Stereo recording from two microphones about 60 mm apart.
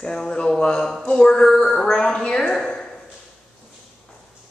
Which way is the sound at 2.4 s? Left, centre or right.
Centre.